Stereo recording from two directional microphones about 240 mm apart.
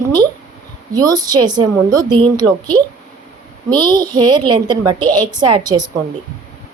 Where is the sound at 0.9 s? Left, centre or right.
Centre.